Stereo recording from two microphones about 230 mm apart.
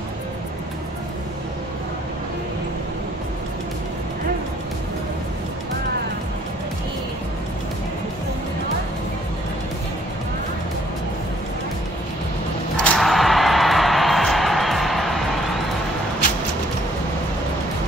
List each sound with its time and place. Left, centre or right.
12.8 s music: centre